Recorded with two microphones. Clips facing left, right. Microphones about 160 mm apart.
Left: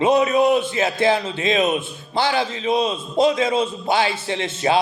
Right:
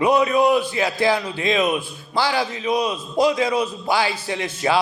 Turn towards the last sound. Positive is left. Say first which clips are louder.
# left 1 dB
turn(degrees=25)  # may be behind; listen again after turning